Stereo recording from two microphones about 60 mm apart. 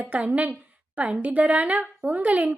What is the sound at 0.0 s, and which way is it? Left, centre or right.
A woman's voice, right.